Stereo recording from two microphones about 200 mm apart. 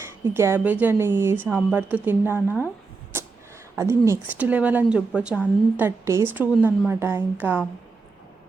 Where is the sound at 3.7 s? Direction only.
10° right (ahead or behind).